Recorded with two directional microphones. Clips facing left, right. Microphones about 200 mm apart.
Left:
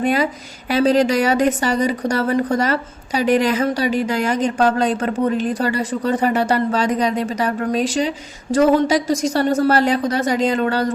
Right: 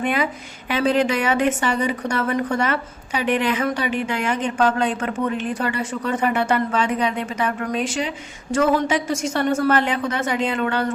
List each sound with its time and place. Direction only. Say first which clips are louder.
0.0 s a woman's voice: left 4 dB; 35° left (ahead or behind)